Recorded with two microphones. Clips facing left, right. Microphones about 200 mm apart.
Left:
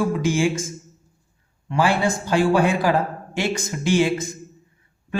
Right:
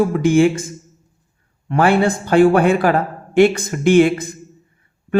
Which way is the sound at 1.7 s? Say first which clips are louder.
Right 5 dB; 60° right (ahead or behind).